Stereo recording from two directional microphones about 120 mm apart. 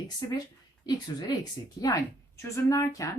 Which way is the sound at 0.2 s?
35° left (ahead or behind).